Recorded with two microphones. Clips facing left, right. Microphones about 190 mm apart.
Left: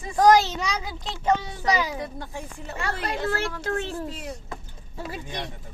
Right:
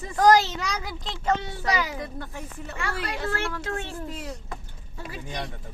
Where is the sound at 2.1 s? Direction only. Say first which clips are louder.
Left 1 dB; 35° left (ahead or behind).